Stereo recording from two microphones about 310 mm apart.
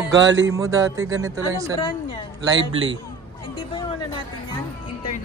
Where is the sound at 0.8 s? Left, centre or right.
Right.